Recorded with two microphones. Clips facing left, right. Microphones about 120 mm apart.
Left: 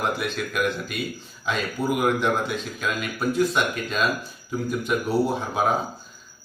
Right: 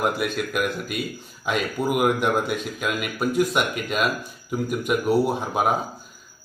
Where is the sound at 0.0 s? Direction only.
5° right (ahead or behind).